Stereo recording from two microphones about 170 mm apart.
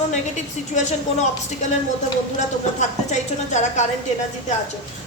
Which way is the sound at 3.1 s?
45° left (ahead or behind).